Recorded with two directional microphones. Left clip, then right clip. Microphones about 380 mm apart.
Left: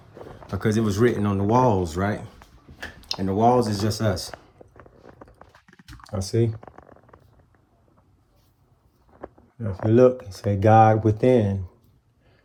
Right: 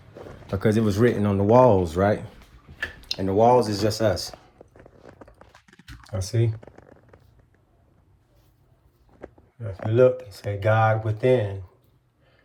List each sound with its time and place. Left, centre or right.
0.5 s speech: centre
6.1 s speech: centre
9.6 s speech: left